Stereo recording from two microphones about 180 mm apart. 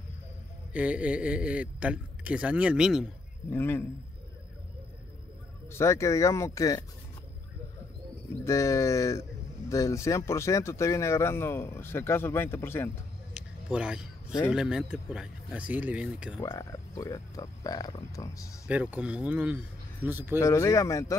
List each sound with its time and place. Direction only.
0.7 s a man's voice: 5° right (ahead or behind)
3.4 s speech: 10° left (ahead or behind)
5.7 s speech: 15° left (ahead or behind)
8.5 s speech: 15° left (ahead or behind)
13.3 s a sound: 5° right (ahead or behind)
14.5 s a man's voice: 5° right (ahead or behind)
16.3 s speech: 20° left (ahead or behind)
18.7 s a man's voice: 5° right (ahead or behind)
20.3 s speech: 15° left (ahead or behind)